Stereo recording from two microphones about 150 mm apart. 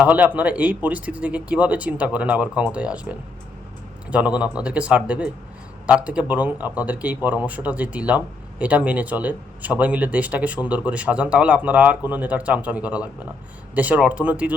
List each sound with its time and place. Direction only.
0.0 s speech: 10° right (ahead or behind)
4.5 s speech: 10° right (ahead or behind)